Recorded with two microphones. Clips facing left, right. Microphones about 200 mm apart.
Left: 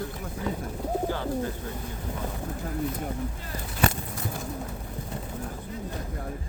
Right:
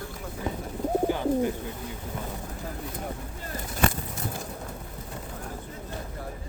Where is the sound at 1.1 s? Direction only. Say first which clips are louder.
Right 4 dB; 15° right (ahead or behind).